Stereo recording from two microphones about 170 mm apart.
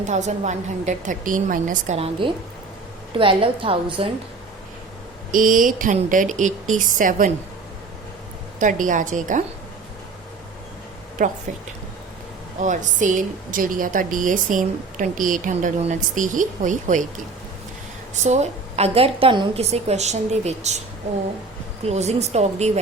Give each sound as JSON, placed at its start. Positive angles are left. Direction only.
{"t": 0.0, "sound": "a woman's voice", "side_deg": -45}
{"t": 2.0, "sound": "a woman's voice", "side_deg": -30}
{"t": 5.3, "sound": "a woman's voice", "side_deg": -50}
{"t": 8.5, "sound": "a woman's voice", "side_deg": -50}
{"t": 11.2, "sound": "a woman's voice", "side_deg": -50}
{"t": 12.5, "sound": "a woman's voice", "side_deg": -45}
{"t": 18.1, "sound": "a woman's voice", "side_deg": -45}
{"t": 21.8, "sound": "a woman's voice", "side_deg": -40}